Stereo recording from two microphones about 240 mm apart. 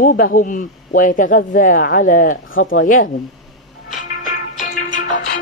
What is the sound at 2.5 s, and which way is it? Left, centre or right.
Speech, left.